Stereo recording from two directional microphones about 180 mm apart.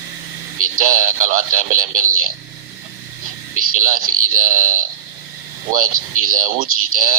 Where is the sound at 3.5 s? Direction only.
50° right (ahead or behind).